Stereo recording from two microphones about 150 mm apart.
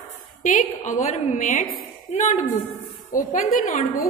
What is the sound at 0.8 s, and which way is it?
A woman's voice, 55° left (ahead or behind).